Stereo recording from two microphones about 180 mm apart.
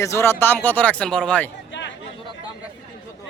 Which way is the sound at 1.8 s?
80° left.